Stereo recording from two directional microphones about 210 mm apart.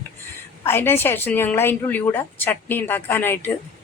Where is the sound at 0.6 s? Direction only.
10° left (ahead or behind).